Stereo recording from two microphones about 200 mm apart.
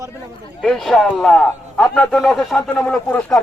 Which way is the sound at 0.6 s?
Centre (ahead or behind).